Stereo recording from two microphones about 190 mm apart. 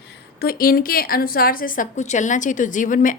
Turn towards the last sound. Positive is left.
turn(degrees=45)  # may be behind; listen again after turning